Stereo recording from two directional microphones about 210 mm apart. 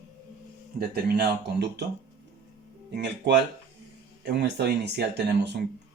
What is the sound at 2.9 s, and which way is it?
Speech, 55° right (ahead or behind).